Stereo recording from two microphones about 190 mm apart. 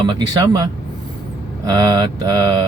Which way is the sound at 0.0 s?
25° right (ahead or behind).